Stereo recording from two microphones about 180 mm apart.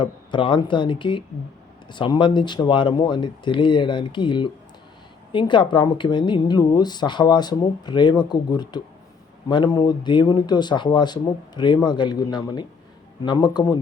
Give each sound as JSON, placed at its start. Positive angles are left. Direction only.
{"t": 0.0, "sound": "a woman's voice", "side_deg": 25}